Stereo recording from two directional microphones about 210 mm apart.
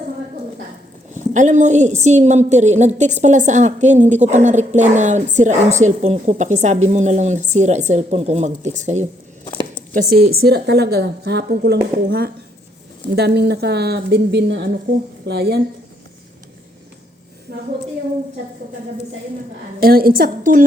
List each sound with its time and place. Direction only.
1.1 s a woman's voice: 35° right (ahead or behind)
17.5 s a woman's voice: 50° right (ahead or behind)
19.8 s speech: 45° right (ahead or behind)